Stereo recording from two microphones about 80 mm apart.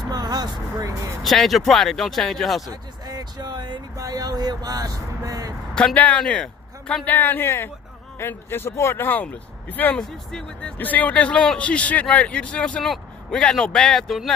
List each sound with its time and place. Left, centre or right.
0.1 s vehicle: right
1.2 s speech: centre
2.7 s speech: right
3.9 s speech: right
5.9 s speech: centre
6.2 s a sound: centre
7.1 s a man's voice: left
12.8 s a man's voice: centre